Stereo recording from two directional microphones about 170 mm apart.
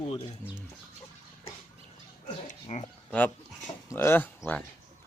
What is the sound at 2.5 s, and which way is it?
Speech, 40° left (ahead or behind).